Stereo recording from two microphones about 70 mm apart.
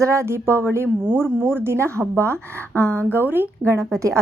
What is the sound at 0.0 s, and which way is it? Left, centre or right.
A woman's voice, right.